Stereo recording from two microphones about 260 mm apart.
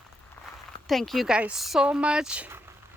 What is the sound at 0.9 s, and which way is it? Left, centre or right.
Speech, centre.